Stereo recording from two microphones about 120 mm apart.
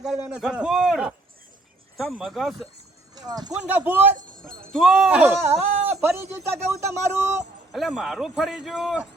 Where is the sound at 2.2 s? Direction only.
Centre (ahead or behind).